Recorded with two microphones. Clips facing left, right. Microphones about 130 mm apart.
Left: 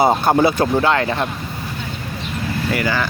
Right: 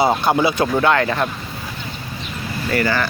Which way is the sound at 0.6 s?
30° left (ahead or behind).